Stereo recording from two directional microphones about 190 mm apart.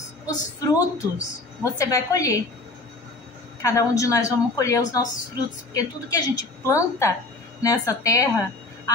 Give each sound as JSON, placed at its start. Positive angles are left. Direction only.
{"t": 0.3, "sound": "a woman's voice", "side_deg": 15}
{"t": 3.6, "sound": "a woman's voice", "side_deg": 15}